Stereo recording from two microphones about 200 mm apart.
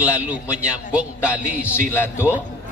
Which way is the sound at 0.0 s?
5° right (ahead or behind).